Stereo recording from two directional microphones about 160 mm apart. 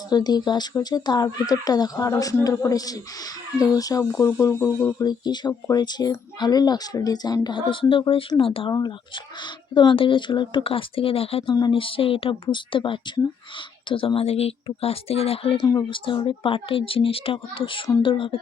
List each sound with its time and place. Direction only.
0.1 s speech: 25° left (ahead or behind)
4.9 s speech: 25° left (ahead or behind)
15.6 s speech: 30° left (ahead or behind)